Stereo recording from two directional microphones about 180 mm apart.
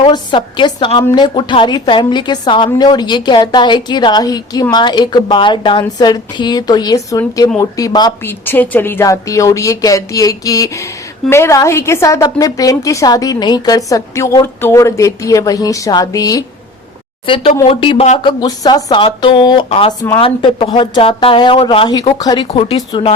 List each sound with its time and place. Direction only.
0.0 s a woman's voice: 25° left (ahead or behind)
18.2 s a woman's voice: 25° left (ahead or behind)
22.4 s a woman's voice: 35° left (ahead or behind)